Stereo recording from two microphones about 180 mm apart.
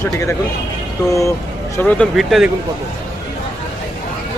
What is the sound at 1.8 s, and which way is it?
Speech, 10° left (ahead or behind).